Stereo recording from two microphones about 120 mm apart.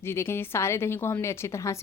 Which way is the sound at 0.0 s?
20° left (ahead or behind).